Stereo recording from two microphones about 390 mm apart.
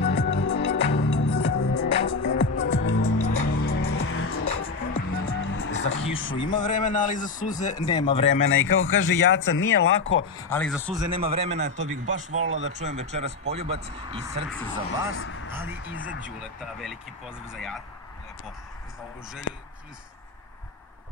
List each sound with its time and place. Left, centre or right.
0.0 s music: left
3.2 s music: left
3.5 s music: left
6.0 s speech: left
6.4 s speech: centre
8.4 s speech: left
10.5 s speech: centre
11.0 s speech: centre
15.0 s speech: left
15.5 s speech: centre
17.5 s speech: centre
19.5 s speech: left